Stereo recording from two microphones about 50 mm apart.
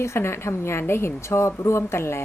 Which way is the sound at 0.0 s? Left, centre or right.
Left.